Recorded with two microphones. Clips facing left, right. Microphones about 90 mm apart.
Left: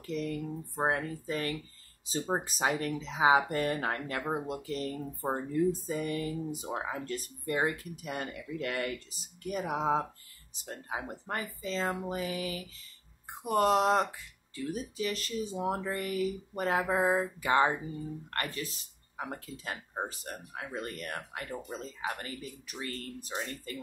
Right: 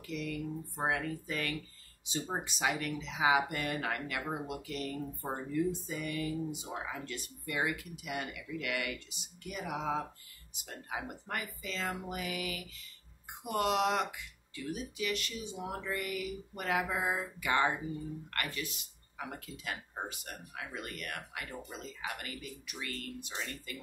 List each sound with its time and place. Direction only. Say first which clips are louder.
0.0 s speech: left 4 dB; 40° left (ahead or behind)